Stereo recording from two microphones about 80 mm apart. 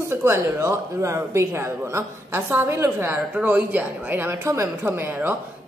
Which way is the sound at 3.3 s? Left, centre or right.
Centre.